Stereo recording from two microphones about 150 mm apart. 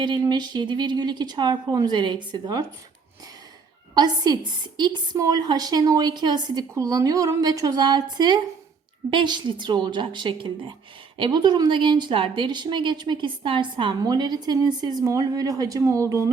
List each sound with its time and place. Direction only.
0.0 s a woman's voice: 30° right (ahead or behind)
3.9 s a woman's voice: 25° right (ahead or behind)